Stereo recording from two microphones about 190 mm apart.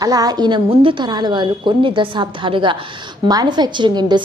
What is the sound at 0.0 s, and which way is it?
A woman's voice, 20° right (ahead or behind).